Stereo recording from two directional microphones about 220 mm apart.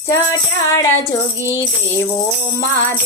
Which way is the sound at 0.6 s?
15° left (ahead or behind).